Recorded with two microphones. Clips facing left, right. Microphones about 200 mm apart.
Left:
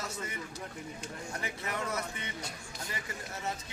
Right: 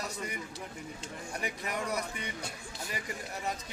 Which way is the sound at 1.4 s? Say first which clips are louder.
Right 2 dB; 15° right (ahead or behind).